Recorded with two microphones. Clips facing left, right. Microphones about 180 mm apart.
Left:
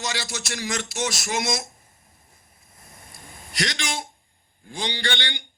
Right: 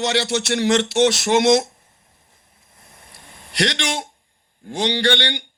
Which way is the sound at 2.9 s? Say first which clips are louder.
Left 1 dB; 65° right (ahead or behind).